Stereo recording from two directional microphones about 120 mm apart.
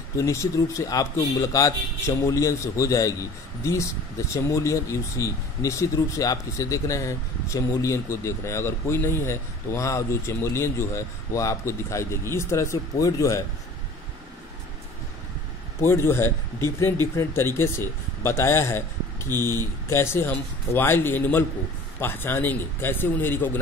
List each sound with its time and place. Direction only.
0.1 s speech: 25° left (ahead or behind)
15.8 s speech: 20° left (ahead or behind)
19.3 s speech: 30° right (ahead or behind)
19.9 s speech: 20° left (ahead or behind)